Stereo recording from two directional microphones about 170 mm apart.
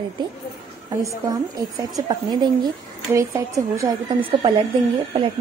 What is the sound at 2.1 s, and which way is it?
Speech, 25° right (ahead or behind).